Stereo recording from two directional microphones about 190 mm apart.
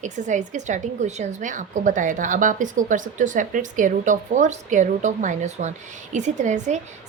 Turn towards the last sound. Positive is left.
turn(degrees=-40)  # may be behind; listen again after turning